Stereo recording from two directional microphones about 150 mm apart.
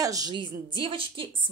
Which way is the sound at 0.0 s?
25° right (ahead or behind).